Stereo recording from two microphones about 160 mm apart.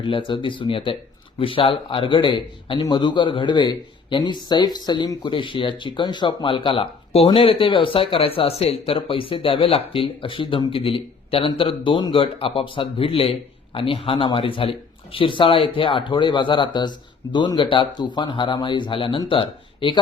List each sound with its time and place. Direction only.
0.0 s speech: 30° left (ahead or behind)